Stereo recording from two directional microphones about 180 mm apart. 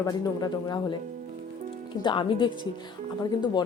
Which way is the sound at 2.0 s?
25° left (ahead or behind).